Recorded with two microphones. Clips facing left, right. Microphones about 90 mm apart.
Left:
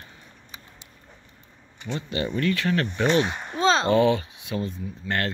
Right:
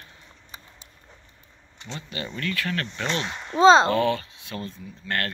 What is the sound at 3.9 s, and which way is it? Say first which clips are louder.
Speech: left 3 dB; 20° left (ahead or behind).